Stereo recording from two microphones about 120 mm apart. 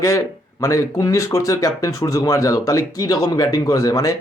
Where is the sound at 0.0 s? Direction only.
25° left (ahead or behind).